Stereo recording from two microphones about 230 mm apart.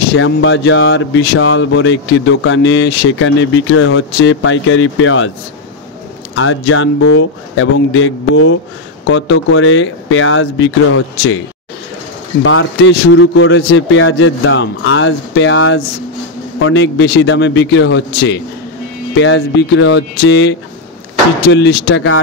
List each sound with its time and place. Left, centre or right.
0.1 s speech: left
6.3 s speech: left
12.4 s a man's voice: left